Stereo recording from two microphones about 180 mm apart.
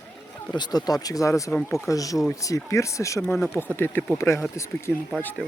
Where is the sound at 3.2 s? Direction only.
5° left (ahead or behind).